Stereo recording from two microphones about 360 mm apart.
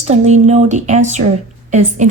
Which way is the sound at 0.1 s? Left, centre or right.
Centre.